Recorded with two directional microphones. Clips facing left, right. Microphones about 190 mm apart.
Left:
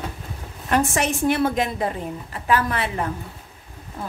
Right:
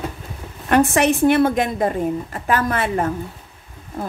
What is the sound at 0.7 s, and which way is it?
A woman's voice, 60° right (ahead or behind).